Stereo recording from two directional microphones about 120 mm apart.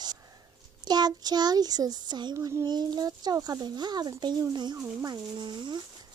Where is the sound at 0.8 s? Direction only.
35° right (ahead or behind).